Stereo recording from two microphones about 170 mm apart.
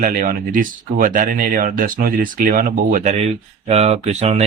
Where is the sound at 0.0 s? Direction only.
50° right (ahead or behind).